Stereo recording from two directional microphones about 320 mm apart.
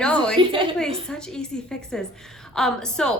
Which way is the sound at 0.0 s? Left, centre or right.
Centre.